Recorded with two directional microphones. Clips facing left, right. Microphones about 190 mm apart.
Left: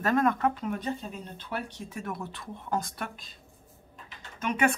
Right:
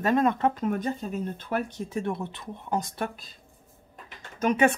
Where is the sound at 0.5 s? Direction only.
45° right (ahead or behind).